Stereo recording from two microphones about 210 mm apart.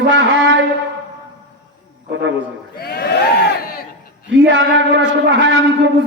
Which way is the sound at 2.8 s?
45° left (ahead or behind).